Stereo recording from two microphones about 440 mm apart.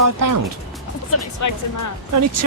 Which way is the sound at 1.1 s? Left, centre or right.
Left.